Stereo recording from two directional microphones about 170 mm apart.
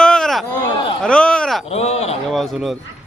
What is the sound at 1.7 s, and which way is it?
Speech, 40° left (ahead or behind).